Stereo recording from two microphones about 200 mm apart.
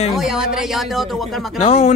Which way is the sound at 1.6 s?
30° left (ahead or behind).